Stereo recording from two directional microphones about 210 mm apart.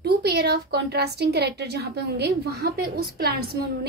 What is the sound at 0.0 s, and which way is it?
A woman's voice, 50° right (ahead or behind).